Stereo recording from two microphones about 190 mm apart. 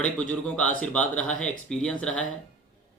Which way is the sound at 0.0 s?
5° left (ahead or behind).